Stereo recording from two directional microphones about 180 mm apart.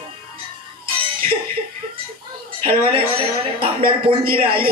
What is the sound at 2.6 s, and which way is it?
Speech, 30° right (ahead or behind).